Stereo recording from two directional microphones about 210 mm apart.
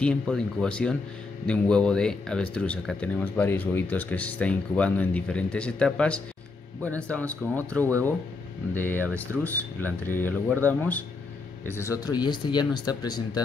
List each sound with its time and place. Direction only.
0.0 s speech: 5° left (ahead or behind)
9.0 s speech: 10° right (ahead or behind)
9.4 s speech: 10° left (ahead or behind)